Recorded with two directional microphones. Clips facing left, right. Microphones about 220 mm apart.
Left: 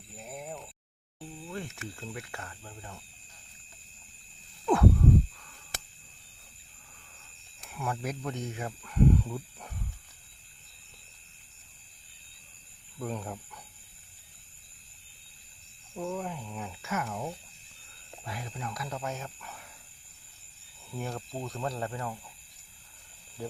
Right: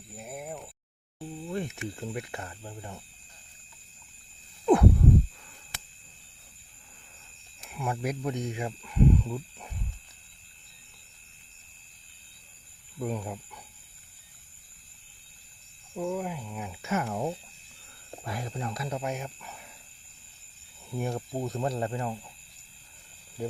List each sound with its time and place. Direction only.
0.2 s a sound: 5° right (ahead or behind)
1.5 s speech: 20° right (ahead or behind)
4.6 s a sound: 20° right (ahead or behind)
7.6 s speech: 10° right (ahead or behind)
13.0 s speech: 10° right (ahead or behind)
16.0 s speech: 10° right (ahead or behind)
16.9 s speech: 30° right (ahead or behind)
18.3 s speech: 40° right (ahead or behind); by 19.1 s 25° right (ahead or behind)
19.1 s speech: 10° right (ahead or behind)
20.9 s speech: 15° right (ahead or behind)